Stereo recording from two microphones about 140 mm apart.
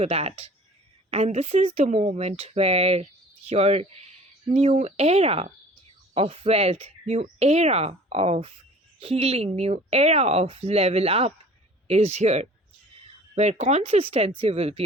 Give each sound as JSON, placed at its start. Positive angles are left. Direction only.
{"t": 0.0, "sound": "speech", "side_deg": -45}